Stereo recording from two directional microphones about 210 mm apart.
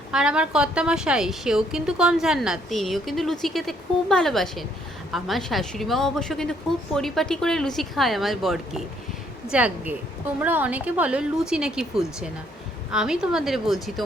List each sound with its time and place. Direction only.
0.1 s a woman's voice: 5° right (ahead or behind)